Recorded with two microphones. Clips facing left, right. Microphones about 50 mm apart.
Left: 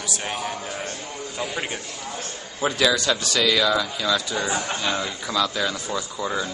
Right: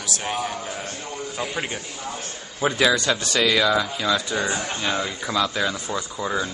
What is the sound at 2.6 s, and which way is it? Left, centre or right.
Speech, centre.